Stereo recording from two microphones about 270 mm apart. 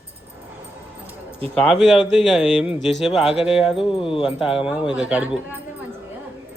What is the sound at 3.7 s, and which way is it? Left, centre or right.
Speech, centre.